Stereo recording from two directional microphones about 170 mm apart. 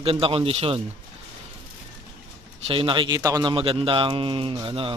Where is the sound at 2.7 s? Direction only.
30° right (ahead or behind).